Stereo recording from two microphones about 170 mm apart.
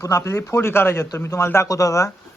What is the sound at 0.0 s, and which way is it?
Speech, 15° left (ahead or behind).